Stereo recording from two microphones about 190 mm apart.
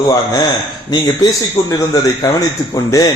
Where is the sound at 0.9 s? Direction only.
20° left (ahead or behind).